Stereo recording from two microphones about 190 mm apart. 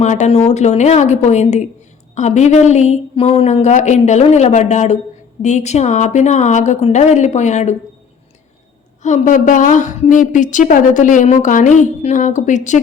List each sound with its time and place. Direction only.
0.0 s a woman's voice: 35° left (ahead or behind)
9.0 s a woman's voice: 40° left (ahead or behind)